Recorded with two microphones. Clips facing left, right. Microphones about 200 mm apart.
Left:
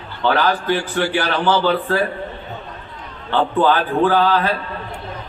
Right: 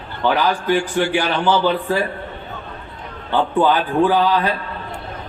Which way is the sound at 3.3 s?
15° right (ahead or behind).